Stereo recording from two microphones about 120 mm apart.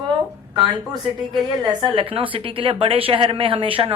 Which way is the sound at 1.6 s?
35° right (ahead or behind).